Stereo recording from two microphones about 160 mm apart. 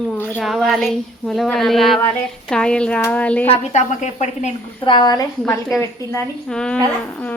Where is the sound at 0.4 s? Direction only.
Centre (ahead or behind).